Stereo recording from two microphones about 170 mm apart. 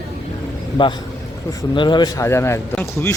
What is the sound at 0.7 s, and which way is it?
A man's voice, 30° left (ahead or behind).